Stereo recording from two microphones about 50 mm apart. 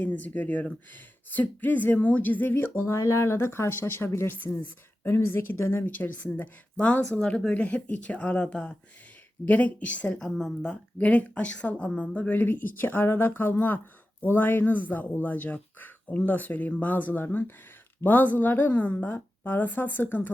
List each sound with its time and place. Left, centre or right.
0.0 s speech: left
2.8 s speech: left
5.8 s speech: left
19.1 s speech: left